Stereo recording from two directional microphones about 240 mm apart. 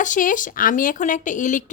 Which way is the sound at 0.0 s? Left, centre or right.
Left.